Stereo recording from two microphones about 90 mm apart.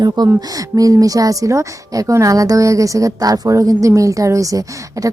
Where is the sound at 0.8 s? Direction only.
40° right (ahead or behind).